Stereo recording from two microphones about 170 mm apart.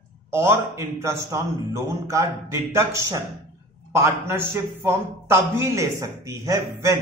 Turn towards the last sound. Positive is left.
turn(degrees=-20)  # may be behind; listen again after turning